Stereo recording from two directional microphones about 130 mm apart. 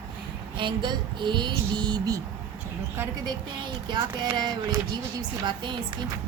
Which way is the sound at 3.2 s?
35° right (ahead or behind).